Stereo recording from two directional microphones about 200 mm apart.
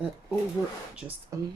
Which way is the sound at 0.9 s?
10° right (ahead or behind).